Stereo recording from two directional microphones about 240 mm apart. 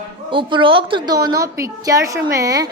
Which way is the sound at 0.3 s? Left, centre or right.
Right.